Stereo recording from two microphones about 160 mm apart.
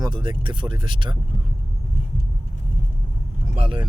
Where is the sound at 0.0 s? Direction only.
30° right (ahead or behind).